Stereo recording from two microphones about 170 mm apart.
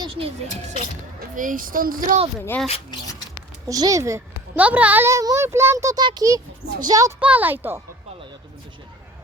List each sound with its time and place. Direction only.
0.0 s a sound: 30° right (ahead or behind)
1.4 s speech: 50° right (ahead or behind)
2.6 s speech: 35° left (ahead or behind)
3.7 s a woman's voice: 20° right (ahead or behind)
7.2 s a woman's voice: 10° right (ahead or behind)